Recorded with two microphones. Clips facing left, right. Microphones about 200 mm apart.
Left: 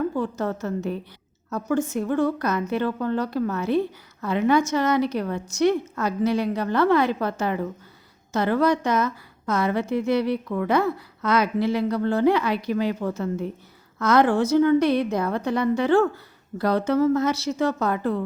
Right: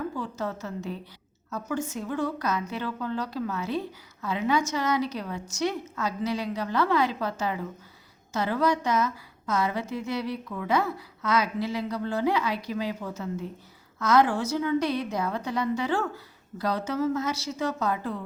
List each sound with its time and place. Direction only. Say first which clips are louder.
0.2 s a woman's voice: left 6 dB; 55° left (ahead or behind)